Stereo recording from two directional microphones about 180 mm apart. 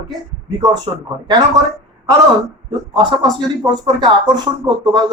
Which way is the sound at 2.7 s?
25° right (ahead or behind).